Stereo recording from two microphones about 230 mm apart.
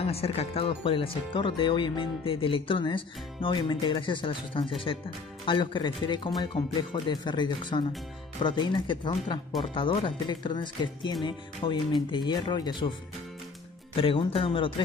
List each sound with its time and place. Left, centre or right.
0.0 s speech: left
13.9 s speech: left